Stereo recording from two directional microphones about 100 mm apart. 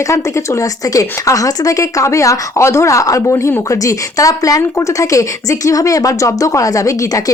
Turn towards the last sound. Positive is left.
turn(degrees=35)  # may be behind; listen again after turning